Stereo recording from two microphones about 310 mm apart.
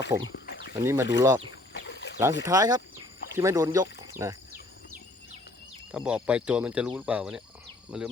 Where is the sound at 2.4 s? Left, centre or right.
Centre.